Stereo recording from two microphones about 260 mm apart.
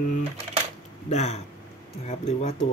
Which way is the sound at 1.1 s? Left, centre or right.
Left.